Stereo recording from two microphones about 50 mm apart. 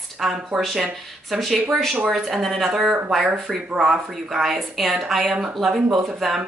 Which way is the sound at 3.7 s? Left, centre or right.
Centre.